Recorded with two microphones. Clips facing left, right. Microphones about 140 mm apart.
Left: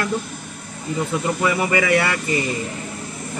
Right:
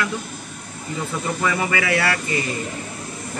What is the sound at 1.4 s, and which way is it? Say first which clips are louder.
Speech: left 1 dB; 10° left (ahead or behind).